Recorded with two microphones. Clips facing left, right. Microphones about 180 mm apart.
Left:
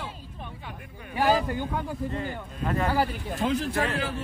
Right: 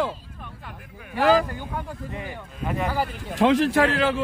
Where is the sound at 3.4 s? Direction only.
90° right.